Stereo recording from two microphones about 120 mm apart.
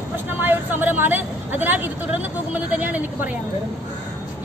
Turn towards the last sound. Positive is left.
turn(degrees=-15)  # may be behind; listen again after turning